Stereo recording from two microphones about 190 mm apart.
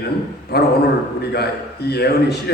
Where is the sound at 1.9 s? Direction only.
60° left (ahead or behind).